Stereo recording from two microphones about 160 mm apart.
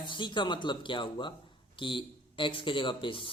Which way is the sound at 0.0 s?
30° left (ahead or behind).